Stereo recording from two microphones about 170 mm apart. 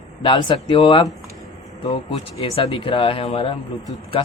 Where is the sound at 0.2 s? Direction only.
30° left (ahead or behind).